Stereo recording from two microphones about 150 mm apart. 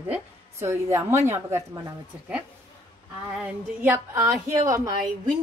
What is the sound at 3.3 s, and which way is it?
Speech, 10° right (ahead or behind).